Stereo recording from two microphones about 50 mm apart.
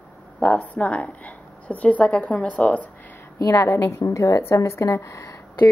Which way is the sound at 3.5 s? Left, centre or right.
Left.